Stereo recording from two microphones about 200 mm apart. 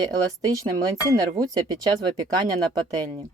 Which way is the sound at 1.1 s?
20° right (ahead or behind).